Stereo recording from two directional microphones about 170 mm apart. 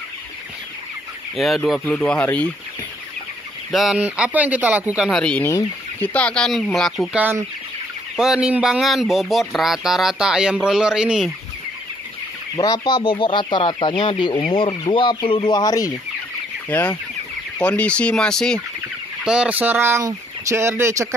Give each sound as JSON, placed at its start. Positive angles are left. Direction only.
{"t": 1.3, "sound": "speech", "side_deg": 0}
{"t": 3.7, "sound": "speech", "side_deg": 0}
{"t": 12.5, "sound": "speech", "side_deg": 20}
{"t": 16.6, "sound": "chicken", "side_deg": 10}
{"t": 17.6, "sound": "speech", "side_deg": 5}